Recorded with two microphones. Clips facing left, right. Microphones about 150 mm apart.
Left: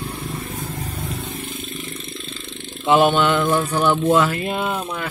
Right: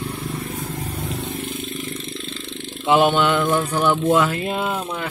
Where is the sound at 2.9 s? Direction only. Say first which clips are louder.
Left 1 dB; 15° right (ahead or behind).